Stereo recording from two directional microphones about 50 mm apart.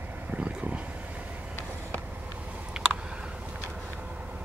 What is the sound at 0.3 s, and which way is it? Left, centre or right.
Vehicle, right.